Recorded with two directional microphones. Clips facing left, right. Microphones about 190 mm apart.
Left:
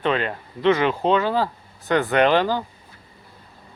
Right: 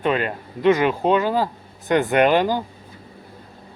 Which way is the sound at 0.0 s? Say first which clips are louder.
Right 1 dB; 10° right (ahead or behind).